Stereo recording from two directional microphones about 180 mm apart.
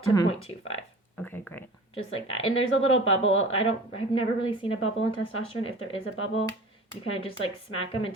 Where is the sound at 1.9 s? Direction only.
30° left (ahead or behind).